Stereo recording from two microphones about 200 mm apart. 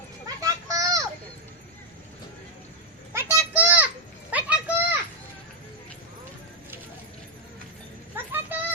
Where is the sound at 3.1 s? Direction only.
15° right (ahead or behind).